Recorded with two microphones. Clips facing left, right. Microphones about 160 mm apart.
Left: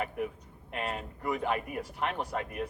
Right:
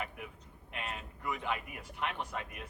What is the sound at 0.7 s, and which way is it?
A man's voice, 40° left (ahead or behind).